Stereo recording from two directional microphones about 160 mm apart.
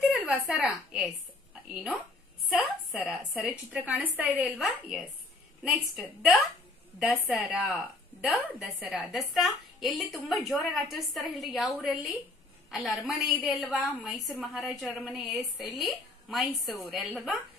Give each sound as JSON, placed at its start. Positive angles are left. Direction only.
{"t": 0.1, "sound": "a woman's voice", "side_deg": 0}